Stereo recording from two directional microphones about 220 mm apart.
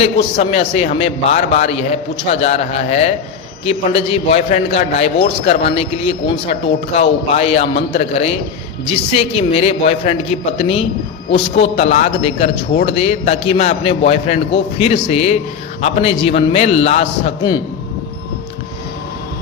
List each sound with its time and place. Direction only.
0.0 s a man's voice: 25° left (ahead or behind)